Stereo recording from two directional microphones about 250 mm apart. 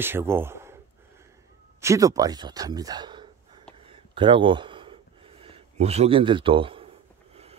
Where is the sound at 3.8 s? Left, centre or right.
Right.